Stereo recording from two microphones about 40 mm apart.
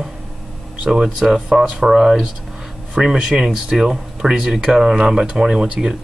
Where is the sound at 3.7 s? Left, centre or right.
Centre.